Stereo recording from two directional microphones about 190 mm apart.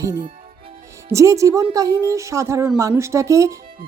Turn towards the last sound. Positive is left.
turn(degrees=-15)  # may be behind; listen again after turning